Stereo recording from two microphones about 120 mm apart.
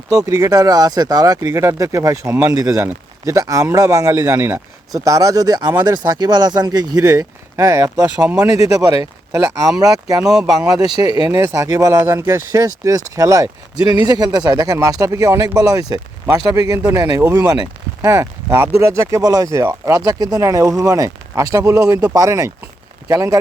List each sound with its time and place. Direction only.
0.1 s speech: 30° right (ahead or behind)
10.3 s speech: 5° right (ahead or behind)
10.7 s speech: 35° right (ahead or behind)
11.3 s speech: 25° right (ahead or behind)